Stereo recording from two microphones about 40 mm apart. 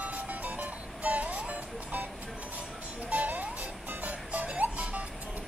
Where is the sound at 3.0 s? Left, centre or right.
Right.